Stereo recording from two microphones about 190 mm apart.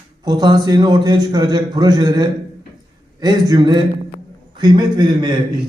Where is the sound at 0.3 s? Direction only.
20° right (ahead or behind).